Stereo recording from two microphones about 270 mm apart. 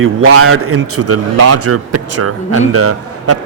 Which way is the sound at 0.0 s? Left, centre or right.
Right.